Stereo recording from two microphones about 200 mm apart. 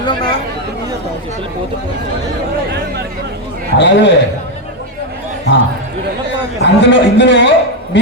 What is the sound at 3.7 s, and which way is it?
Speech, 60° left (ahead or behind).